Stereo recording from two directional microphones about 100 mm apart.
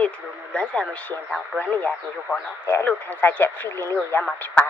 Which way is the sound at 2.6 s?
20° left (ahead or behind).